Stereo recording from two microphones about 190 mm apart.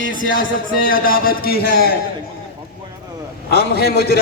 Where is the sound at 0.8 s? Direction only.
50° left (ahead or behind).